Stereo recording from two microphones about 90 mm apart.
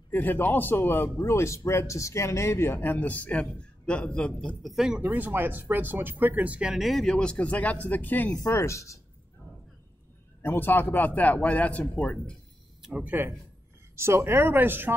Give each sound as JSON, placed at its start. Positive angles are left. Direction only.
{"t": 0.1, "sound": "a man's voice", "side_deg": 20}
{"t": 4.6, "sound": "speech", "side_deg": -5}
{"t": 5.0, "sound": "speech", "side_deg": -20}
{"t": 8.4, "sound": "speech", "side_deg": 30}
{"t": 10.4, "sound": "a man's voice", "side_deg": 25}
{"t": 12.9, "sound": "speech", "side_deg": -20}
{"t": 13.9, "sound": "speech", "side_deg": -30}